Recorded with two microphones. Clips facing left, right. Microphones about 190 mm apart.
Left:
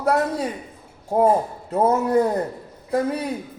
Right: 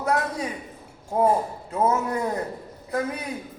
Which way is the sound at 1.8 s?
35° left (ahead or behind).